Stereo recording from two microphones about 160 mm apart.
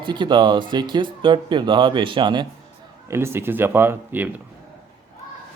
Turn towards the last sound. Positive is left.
turn(degrees=-15)  # may be behind; listen again after turning